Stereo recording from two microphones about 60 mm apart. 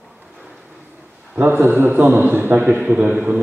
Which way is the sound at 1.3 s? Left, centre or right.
Right.